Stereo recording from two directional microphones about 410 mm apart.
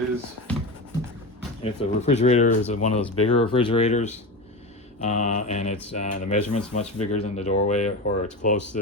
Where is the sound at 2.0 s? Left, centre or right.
Centre.